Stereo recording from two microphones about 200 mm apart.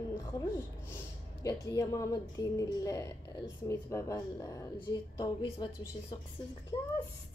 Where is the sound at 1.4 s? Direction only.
15° left (ahead or behind).